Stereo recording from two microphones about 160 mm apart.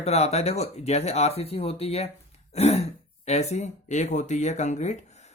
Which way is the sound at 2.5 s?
40° left (ahead or behind).